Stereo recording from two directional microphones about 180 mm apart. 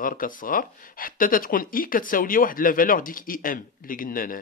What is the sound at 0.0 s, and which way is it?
A man's voice, 50° left (ahead or behind).